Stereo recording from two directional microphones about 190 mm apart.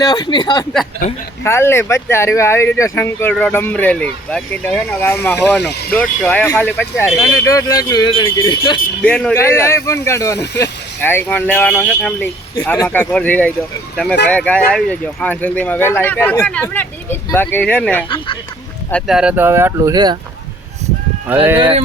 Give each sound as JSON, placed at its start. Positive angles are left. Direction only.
{"t": 0.0, "sound": "speech", "side_deg": 20}
{"t": 5.5, "sound": "speech", "side_deg": 60}
{"t": 5.9, "sound": "speech", "side_deg": 10}
{"t": 9.0, "sound": "speech", "side_deg": 5}
{"t": 12.5, "sound": "speech", "side_deg": 20}
{"t": 21.6, "sound": "a sound", "side_deg": -30}